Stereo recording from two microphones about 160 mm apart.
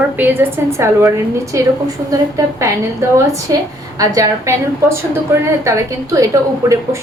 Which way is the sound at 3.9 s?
20° right (ahead or behind).